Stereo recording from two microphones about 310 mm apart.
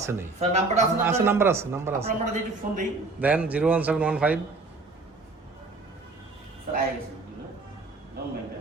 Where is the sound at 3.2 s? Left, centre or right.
Centre.